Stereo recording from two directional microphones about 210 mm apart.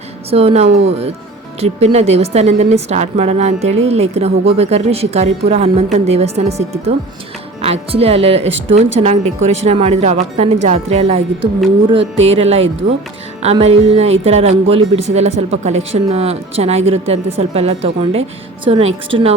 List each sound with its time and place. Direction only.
0.3 s a woman's voice: 30° right (ahead or behind)
12.2 s speech: 30° right (ahead or behind)